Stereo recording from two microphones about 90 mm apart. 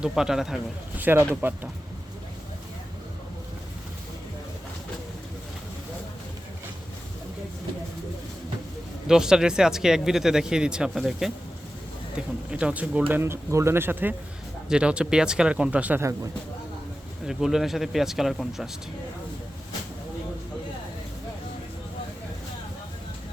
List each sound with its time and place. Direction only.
0.1 s speech: 5° right (ahead or behind)
0.9 s speech: 20° right (ahead or behind)
9.0 s speech: 5° right (ahead or behind)
13.1 s speech: 25° right (ahead or behind)
14.7 s speech: 10° right (ahead or behind)
16.0 s a man's voice: 35° right (ahead or behind)
17.2 s speech: 5° right (ahead or behind)